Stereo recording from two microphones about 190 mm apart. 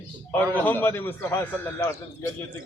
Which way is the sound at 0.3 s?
10° left (ahead or behind).